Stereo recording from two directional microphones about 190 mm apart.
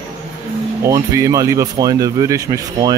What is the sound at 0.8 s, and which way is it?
Speech, 15° right (ahead or behind).